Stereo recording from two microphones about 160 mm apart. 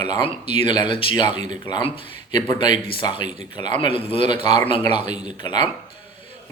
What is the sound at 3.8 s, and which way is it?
Speech, 35° left (ahead or behind).